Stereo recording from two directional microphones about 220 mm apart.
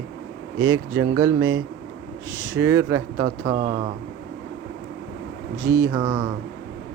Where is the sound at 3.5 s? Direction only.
25° right (ahead or behind).